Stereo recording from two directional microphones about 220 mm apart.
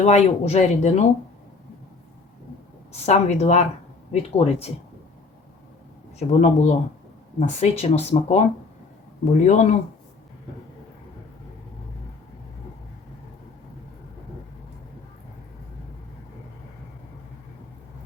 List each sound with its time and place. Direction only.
0.0 s speech: 30° left (ahead or behind)
2.9 s a woman's voice: 30° left (ahead or behind)
6.1 s a woman's voice: 30° left (ahead or behind)
9.4 s speech: 35° left (ahead or behind)